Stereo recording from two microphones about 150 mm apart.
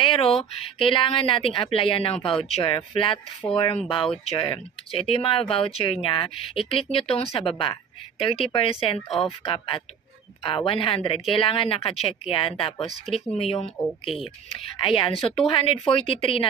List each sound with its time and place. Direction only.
0.0 s speech: 35° left (ahead or behind)
13.1 s speech: centre (ahead or behind)
13.4 s speech: 40° left (ahead or behind)